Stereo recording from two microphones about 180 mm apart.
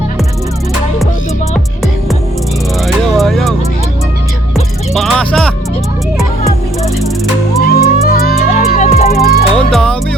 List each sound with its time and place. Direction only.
2.8 s music: centre (ahead or behind)
4.9 s music: 5° left (ahead or behind)
7.6 s music: 55° left (ahead or behind)
8.4 s music: 40° left (ahead or behind)
9.1 s music: 55° left (ahead or behind)
9.6 s music: 5° left (ahead or behind)